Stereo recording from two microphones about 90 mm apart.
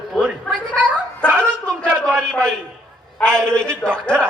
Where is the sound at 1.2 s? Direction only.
10° left (ahead or behind).